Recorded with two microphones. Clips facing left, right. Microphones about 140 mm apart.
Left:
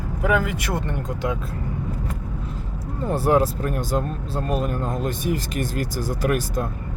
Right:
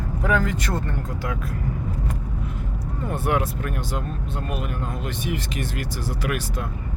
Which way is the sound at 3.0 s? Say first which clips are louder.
Left 5 dB; 35° left (ahead or behind).